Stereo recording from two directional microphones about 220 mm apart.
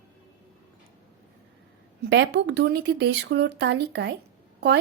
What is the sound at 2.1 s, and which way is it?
Speech, 50° right (ahead or behind).